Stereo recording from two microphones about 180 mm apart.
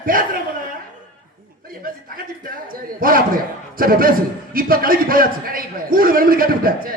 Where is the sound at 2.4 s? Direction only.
50° right (ahead or behind).